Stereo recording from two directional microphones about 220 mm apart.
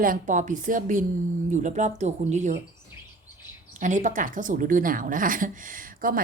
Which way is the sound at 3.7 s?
35° right (ahead or behind).